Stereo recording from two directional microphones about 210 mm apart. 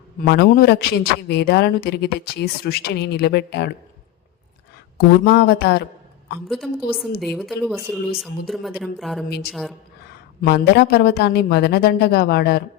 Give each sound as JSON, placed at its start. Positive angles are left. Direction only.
{"t": 0.2, "sound": "speech", "side_deg": 45}
{"t": 5.2, "sound": "speech", "side_deg": 50}
{"t": 7.2, "sound": "speech", "side_deg": 0}
{"t": 10.4, "sound": "speech", "side_deg": 50}